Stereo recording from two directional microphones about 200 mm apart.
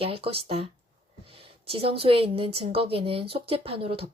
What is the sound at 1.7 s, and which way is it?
A woman's voice, 30° right (ahead or behind).